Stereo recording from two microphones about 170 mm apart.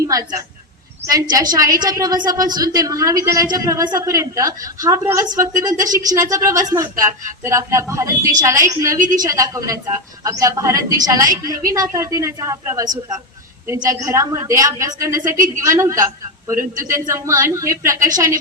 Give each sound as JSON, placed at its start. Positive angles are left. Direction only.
{"t": 0.0, "sound": "a woman's voice", "side_deg": -20}